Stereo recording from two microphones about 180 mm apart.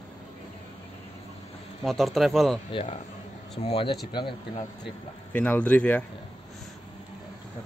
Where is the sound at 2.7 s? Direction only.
35° left (ahead or behind).